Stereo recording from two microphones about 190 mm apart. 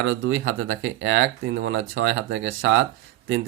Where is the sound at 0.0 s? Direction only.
85° right.